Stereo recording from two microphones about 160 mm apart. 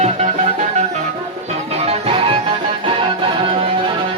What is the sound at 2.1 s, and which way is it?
Music, 35° right (ahead or behind).